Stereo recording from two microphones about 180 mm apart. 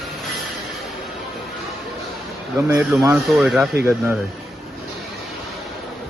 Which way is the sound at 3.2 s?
Centre (ahead or behind).